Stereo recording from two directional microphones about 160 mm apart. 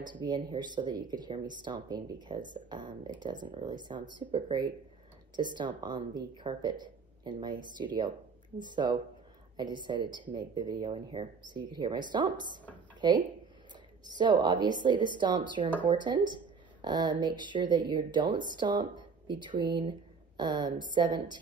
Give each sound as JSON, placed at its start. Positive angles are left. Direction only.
{"t": 0.1, "sound": "a woman's voice", "side_deg": -30}